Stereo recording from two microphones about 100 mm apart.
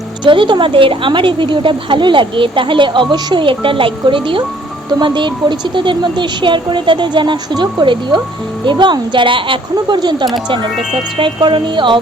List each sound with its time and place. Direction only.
0.3 s speech: 55° right (ahead or behind)